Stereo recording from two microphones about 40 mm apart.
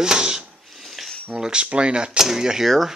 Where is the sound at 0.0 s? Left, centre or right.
Centre.